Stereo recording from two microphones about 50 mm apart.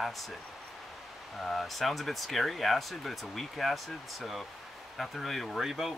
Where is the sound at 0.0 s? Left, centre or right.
Centre.